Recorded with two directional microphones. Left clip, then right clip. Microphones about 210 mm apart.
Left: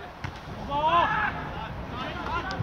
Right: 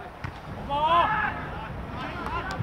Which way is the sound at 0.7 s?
50° right (ahead or behind).